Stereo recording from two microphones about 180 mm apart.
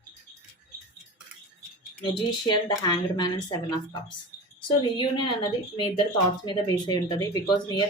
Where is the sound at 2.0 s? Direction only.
25° left (ahead or behind).